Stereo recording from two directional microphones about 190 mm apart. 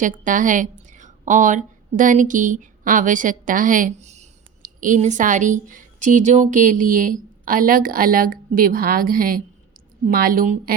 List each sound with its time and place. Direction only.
0.0 s a woman's voice: 45° right (ahead or behind)